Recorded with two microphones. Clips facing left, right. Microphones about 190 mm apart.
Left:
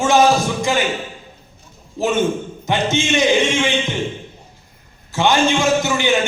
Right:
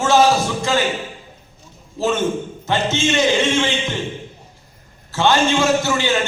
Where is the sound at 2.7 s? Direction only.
15° left (ahead or behind).